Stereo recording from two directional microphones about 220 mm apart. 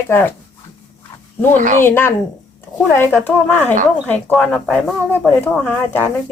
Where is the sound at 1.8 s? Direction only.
10° left (ahead or behind).